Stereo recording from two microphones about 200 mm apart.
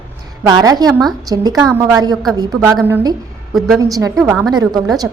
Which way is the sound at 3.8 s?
15° right (ahead or behind).